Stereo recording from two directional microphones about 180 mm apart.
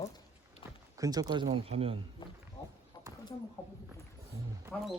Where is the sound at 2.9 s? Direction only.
25° left (ahead or behind).